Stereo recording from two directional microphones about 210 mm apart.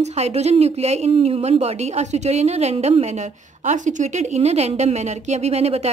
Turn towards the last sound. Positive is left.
turn(degrees=-30)  # may be behind; listen again after turning